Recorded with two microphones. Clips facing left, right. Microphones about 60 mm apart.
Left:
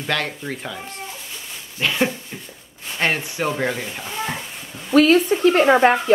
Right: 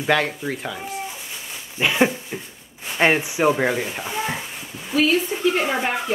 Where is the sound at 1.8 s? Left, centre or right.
Centre.